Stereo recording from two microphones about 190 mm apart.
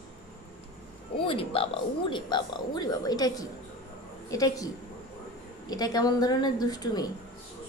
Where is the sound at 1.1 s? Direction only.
30° left (ahead or behind).